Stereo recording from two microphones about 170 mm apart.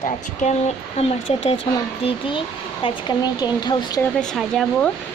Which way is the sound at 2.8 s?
25° left (ahead or behind).